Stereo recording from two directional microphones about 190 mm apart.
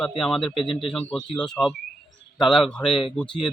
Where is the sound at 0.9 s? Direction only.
Centre (ahead or behind).